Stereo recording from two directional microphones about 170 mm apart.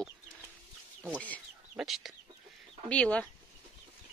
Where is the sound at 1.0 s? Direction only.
10° left (ahead or behind).